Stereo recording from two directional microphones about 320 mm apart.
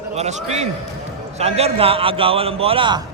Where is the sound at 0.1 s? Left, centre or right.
Right.